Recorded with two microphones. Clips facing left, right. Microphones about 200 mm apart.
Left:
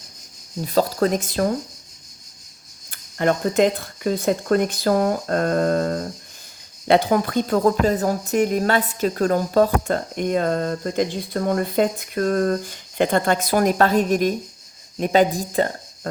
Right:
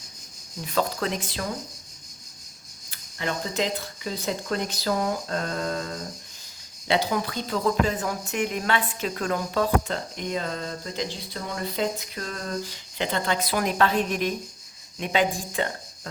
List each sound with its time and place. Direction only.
0.6 s speech: 35° left (ahead or behind)
2.9 s speech: 50° left (ahead or behind)